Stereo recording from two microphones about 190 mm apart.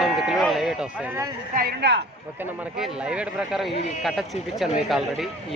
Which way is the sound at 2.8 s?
5° right (ahead or behind).